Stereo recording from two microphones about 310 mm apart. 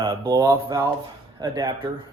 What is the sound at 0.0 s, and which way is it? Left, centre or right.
Speech, centre.